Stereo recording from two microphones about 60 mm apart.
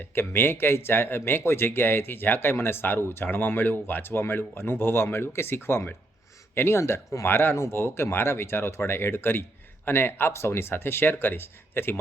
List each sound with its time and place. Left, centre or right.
0.1 s speech: left
7.3 s speech: left